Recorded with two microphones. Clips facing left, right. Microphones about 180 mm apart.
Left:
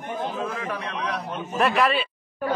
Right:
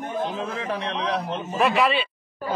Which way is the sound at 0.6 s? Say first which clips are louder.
Right 2 dB; 30° right (ahead or behind).